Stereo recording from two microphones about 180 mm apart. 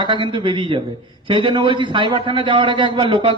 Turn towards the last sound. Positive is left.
turn(degrees=-30)  # may be behind; listen again after turning